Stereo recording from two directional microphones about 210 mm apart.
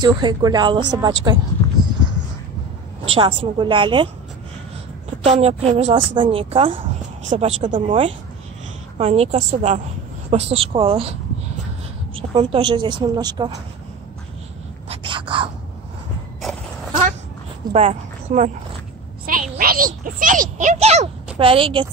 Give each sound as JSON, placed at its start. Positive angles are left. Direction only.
{"t": 0.0, "sound": "a woman's voice", "side_deg": -20}
{"t": 3.1, "sound": "a woman's voice", "side_deg": -25}
{"t": 5.2, "sound": "a woman's voice", "side_deg": -30}
{"t": 12.2, "sound": "a woman's voice", "side_deg": -25}
{"t": 14.9, "sound": "a sound", "side_deg": -25}
{"t": 16.3, "sound": "a sound", "side_deg": 0}
{"t": 17.7, "sound": "speech", "side_deg": -35}
{"t": 19.2, "sound": "a sound", "side_deg": -40}
{"t": 21.4, "sound": "a woman's voice", "side_deg": -25}